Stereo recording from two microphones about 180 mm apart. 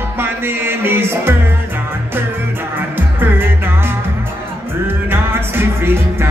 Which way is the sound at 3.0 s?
10° right (ahead or behind).